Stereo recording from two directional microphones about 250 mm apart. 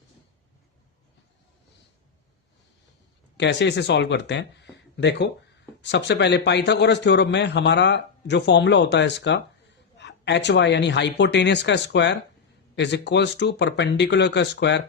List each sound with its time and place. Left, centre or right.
3.3 s speech: left